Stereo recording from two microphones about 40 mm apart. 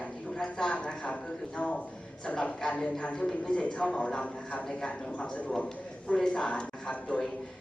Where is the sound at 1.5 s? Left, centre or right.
Left.